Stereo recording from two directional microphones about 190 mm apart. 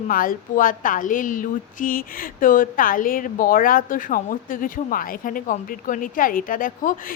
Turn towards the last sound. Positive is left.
turn(degrees=45)  # may be behind; listen again after turning